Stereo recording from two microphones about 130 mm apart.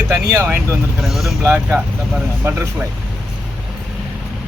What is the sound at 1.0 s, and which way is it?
Speech, centre (ahead or behind).